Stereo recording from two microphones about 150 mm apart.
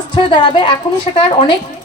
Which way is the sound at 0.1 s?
35° left (ahead or behind).